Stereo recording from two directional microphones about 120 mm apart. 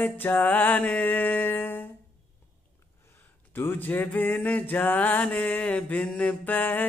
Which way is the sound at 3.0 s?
20° left (ahead or behind).